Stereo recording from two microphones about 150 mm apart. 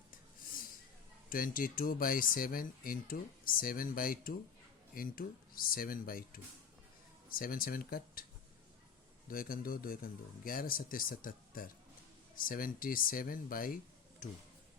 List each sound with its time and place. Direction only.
1.3 s speech: 70° left (ahead or behind)
9.3 s speech: 75° left (ahead or behind)
14.2 s speech: 60° left (ahead or behind)